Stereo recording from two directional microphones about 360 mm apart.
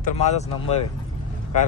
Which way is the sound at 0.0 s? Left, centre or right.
Centre.